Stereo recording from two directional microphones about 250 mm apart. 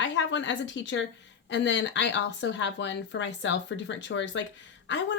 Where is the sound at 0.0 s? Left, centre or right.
Left.